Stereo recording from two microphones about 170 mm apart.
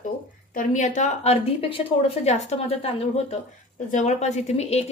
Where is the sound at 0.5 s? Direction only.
45° left (ahead or behind).